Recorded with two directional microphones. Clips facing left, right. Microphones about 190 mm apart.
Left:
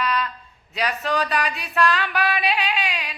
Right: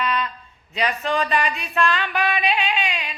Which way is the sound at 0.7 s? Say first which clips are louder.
Right 1 dB; centre (ahead or behind).